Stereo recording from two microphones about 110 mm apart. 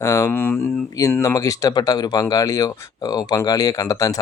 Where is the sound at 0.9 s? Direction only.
30° left (ahead or behind).